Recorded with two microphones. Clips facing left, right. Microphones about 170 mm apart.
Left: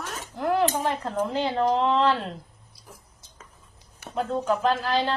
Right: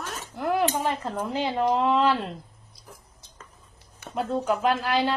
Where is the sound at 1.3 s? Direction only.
10° right (ahead or behind).